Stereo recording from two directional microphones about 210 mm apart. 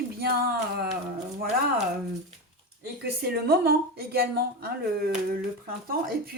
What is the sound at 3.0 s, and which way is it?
Speech, 50° right (ahead or behind).